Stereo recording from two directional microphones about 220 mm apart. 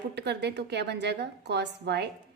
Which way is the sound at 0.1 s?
50° right (ahead or behind).